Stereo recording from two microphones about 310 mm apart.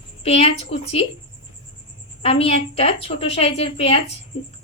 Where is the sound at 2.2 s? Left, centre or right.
Centre.